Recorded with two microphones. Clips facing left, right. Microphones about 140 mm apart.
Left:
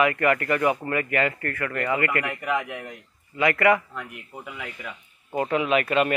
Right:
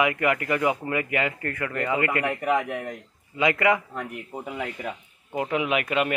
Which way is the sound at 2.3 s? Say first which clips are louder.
Right 3 dB; 35° right (ahead or behind).